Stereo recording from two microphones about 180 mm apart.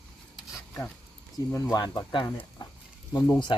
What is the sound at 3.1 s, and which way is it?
Speech, 25° left (ahead or behind).